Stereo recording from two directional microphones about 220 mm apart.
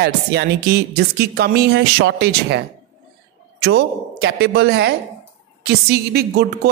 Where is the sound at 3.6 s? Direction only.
50° right (ahead or behind).